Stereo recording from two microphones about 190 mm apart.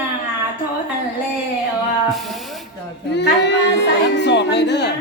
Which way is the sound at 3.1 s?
65° left (ahead or behind).